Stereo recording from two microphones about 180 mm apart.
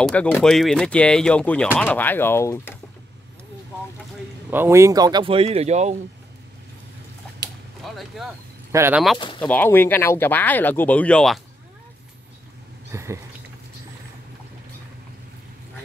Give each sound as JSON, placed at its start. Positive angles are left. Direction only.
{"t": 0.0, "sound": "speech", "side_deg": 5}
{"t": 4.5, "sound": "speech", "side_deg": -15}
{"t": 7.8, "sound": "speech", "side_deg": 0}
{"t": 8.7, "sound": "speech", "side_deg": -15}
{"t": 9.4, "sound": "speech", "side_deg": 10}
{"t": 12.9, "sound": "rodents", "side_deg": -15}